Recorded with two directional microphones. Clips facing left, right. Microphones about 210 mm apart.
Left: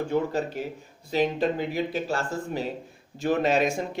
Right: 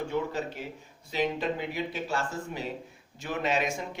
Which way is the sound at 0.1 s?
40° left (ahead or behind).